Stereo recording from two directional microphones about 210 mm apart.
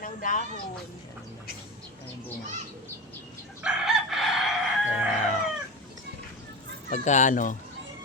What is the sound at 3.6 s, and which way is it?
Chicken, centre (ahead or behind).